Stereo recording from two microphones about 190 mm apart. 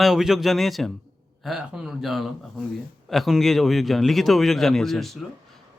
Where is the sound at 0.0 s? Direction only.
Centre (ahead or behind).